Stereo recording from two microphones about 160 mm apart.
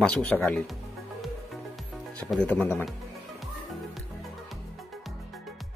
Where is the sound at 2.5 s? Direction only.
10° left (ahead or behind).